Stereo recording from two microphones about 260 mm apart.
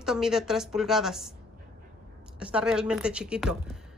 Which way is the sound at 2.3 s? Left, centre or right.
Centre.